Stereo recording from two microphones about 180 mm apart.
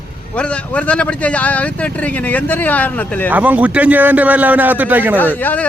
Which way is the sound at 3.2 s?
10° right (ahead or behind).